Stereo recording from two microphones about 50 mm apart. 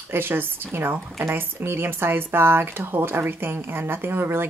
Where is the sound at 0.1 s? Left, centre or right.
Right.